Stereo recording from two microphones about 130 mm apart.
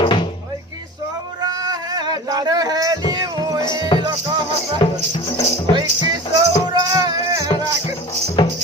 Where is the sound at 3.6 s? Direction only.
35° left (ahead or behind).